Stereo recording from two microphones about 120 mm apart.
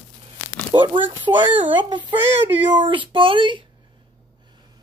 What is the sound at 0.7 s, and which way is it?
Speech, 45° right (ahead or behind).